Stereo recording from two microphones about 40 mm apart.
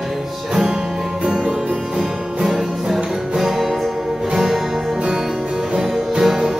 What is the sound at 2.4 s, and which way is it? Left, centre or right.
Music, centre.